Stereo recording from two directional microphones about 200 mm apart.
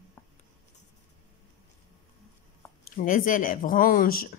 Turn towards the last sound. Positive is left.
turn(degrees=45)  # may be behind; listen again after turning